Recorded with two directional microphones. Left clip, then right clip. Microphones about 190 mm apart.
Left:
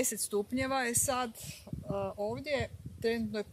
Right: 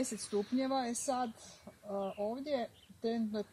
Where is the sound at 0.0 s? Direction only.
25° left (ahead or behind).